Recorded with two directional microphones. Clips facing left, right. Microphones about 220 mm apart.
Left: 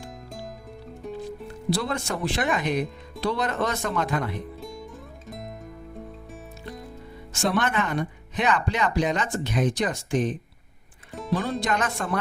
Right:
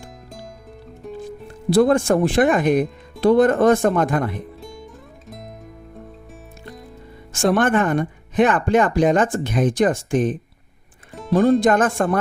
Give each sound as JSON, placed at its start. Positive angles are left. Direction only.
{"t": 1.0, "sound": "music", "side_deg": 0}
{"t": 1.7, "sound": "speech", "side_deg": -50}
{"t": 4.6, "sound": "music", "side_deg": 0}
{"t": 7.3, "sound": "speech", "side_deg": -50}
{"t": 11.1, "sound": "music", "side_deg": 0}
{"t": 11.6, "sound": "speech", "side_deg": -50}